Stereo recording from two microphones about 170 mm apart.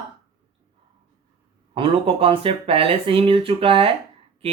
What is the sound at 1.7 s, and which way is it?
Speech, 30° right (ahead or behind).